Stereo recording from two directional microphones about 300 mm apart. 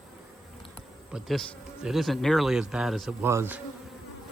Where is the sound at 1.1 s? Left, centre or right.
Centre.